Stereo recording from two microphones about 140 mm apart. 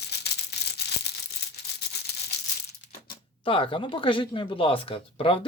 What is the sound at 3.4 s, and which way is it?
Speech, 40° left (ahead or behind).